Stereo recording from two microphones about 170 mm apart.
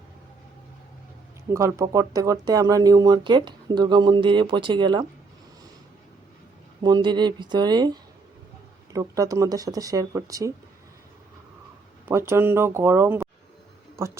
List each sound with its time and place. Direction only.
1.5 s speech: 15° right (ahead or behind)
6.8 s speech: 25° right (ahead or behind)
12.0 s speech: 15° right (ahead or behind)